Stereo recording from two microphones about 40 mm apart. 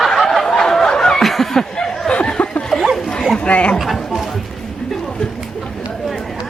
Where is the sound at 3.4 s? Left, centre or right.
Left.